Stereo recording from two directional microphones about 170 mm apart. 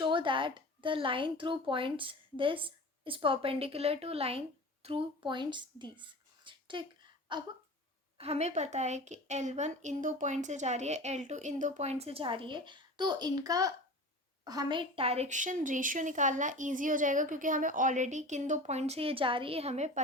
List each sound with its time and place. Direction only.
0.0 s speech: 30° right (ahead or behind)
7.3 s a sound: 30° right (ahead or behind)
8.2 s a woman's voice: 40° right (ahead or behind)